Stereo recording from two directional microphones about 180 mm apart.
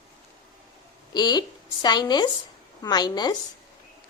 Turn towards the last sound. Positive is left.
turn(degrees=25)  # may be behind; listen again after turning